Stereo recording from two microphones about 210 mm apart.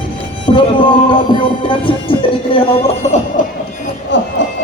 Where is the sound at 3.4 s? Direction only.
40° left (ahead or behind).